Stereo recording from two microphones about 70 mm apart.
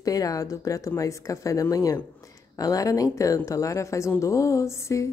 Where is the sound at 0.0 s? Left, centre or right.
Left.